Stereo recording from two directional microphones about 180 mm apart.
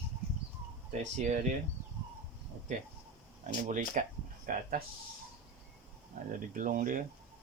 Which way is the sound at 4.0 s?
45° right (ahead or behind).